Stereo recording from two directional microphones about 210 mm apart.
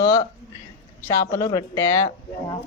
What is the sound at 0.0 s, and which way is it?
Speech, 20° left (ahead or behind).